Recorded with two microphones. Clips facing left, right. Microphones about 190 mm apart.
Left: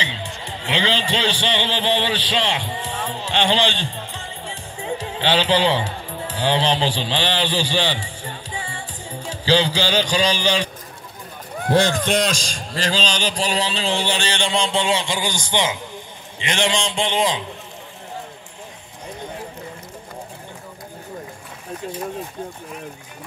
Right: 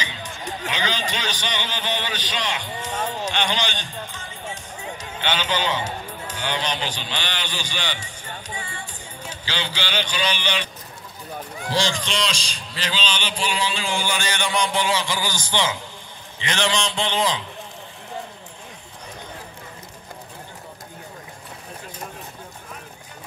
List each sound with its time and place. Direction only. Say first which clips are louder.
0.0 s a man's voice: left 2 dB; 25° left (ahead or behind)
4.5 s music: left 6 dB; 30° left (ahead or behind)
6.3 s a man's voice: left 8 dB; 30° left (ahead or behind)
11.6 s a man's voice: left 7 dB; 55° left (ahead or behind); by 17.5 s 20° left (ahead or behind)